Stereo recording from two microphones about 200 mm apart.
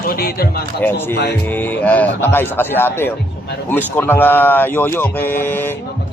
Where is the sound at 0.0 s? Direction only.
50° left (ahead or behind).